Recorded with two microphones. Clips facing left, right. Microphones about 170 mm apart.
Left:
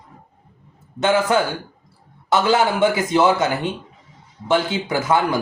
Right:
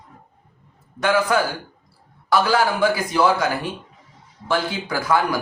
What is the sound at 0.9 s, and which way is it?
A man's voice, 25° left (ahead or behind).